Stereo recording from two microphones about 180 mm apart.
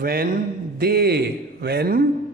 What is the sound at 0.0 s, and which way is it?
A man's voice, 60° right (ahead or behind).